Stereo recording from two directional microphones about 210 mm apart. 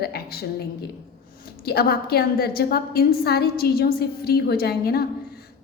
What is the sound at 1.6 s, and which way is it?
A woman's voice, 50° left (ahead or behind).